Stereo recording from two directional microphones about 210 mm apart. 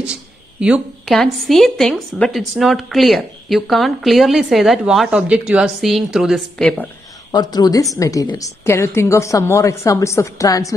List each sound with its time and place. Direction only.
0.0 s a woman's voice: 5° right (ahead or behind)
7.2 s a woman's voice: 20° left (ahead or behind)